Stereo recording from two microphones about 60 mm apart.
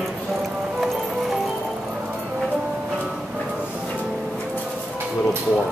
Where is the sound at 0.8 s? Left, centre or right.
Centre.